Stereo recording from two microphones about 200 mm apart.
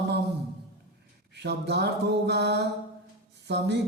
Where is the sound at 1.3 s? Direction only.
60° right (ahead or behind).